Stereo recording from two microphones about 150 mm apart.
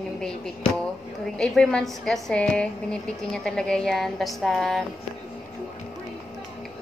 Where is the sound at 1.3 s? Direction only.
5° left (ahead or behind).